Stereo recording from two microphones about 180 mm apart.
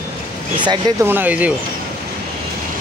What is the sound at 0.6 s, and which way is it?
Speech, 25° right (ahead or behind).